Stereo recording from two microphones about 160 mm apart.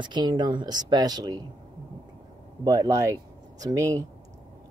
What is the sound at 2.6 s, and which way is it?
Speech, 25° right (ahead or behind).